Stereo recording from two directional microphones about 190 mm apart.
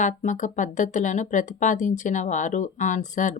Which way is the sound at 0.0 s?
40° left (ahead or behind).